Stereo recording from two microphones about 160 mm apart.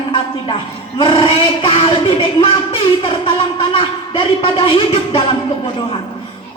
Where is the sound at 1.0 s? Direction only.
30° left (ahead or behind).